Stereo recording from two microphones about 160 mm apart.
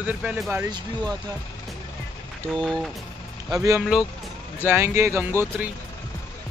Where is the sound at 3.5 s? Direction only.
20° right (ahead or behind).